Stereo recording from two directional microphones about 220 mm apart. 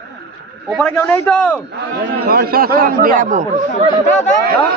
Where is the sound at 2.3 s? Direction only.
45° right (ahead or behind).